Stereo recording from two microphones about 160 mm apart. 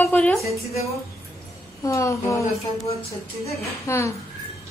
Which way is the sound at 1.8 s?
20° left (ahead or behind).